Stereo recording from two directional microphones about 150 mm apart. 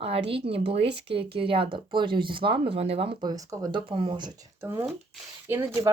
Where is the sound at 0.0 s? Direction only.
40° right (ahead or behind).